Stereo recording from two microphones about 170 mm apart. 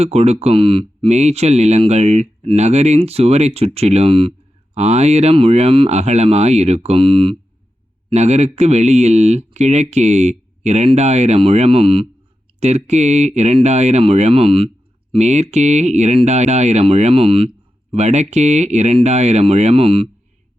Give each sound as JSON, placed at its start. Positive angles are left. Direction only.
{"t": 0.0, "sound": "speech", "side_deg": -40}